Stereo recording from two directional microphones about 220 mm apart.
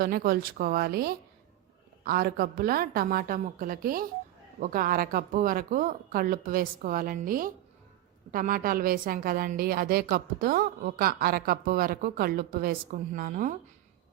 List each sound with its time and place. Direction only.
0.0 s a woman's voice: 40° right (ahead or behind)